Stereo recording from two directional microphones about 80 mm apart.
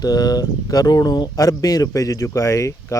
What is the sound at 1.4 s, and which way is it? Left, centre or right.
Speech, left.